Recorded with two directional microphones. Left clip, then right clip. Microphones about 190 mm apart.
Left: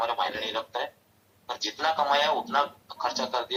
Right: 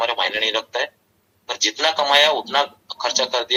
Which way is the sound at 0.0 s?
30° right (ahead or behind).